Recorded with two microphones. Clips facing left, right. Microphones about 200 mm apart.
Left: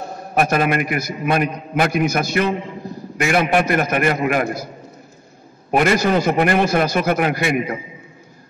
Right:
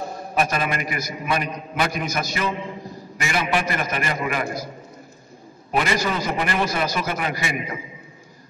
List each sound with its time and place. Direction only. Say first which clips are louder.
0.3 s a man's voice: left 6 dB; 55° left (ahead or behind)
5.7 s a man's voice: left 7 dB; 55° left (ahead or behind)